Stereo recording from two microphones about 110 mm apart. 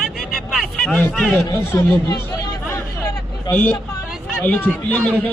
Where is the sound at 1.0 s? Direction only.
10° left (ahead or behind).